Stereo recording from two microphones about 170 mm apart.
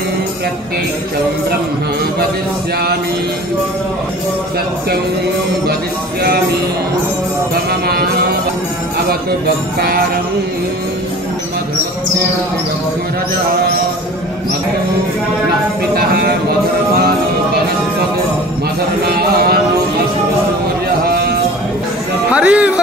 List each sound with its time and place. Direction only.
9.8 s jingle bell: 60° right (ahead or behind)
21.0 s a sound: 65° right (ahead or behind)
22.3 s speech: 5° right (ahead or behind)